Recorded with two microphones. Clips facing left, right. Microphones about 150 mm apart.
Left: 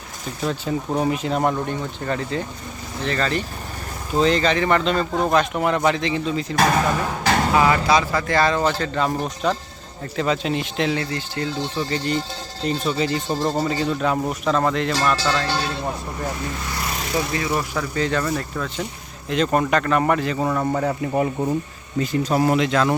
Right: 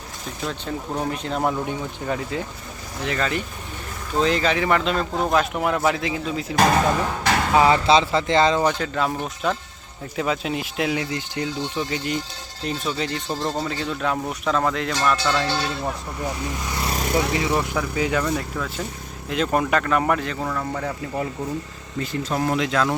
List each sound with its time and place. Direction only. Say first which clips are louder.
0.4 s speech: left 5 dB; 5° left (ahead or behind)
7.0 s vehicle: left 2 dB; 10° left (ahead or behind)
7.5 s speech: right 3 dB; 25° right (ahead or behind)
8.8 s speech: left 2 dB; 5° right (ahead or behind)
16.8 s vehicle: right 4 dB; 40° right (ahead or behind)
17.3 s speech: right 1 dB; 15° right (ahead or behind); by 20.4 s centre (ahead or behind)
20.4 s speech: left 5 dB; 25° left (ahead or behind)
22.4 s speech: left 3 dB; centre (ahead or behind)